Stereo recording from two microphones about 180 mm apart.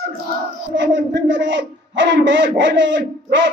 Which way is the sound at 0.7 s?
75° right (ahead or behind).